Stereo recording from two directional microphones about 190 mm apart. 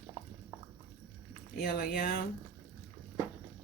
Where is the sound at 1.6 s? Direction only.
55° left (ahead or behind).